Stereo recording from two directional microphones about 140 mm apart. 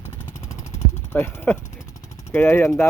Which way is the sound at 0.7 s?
15° left (ahead or behind).